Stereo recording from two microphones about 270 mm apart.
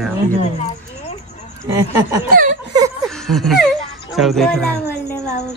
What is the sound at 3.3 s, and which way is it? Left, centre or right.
Speech, centre.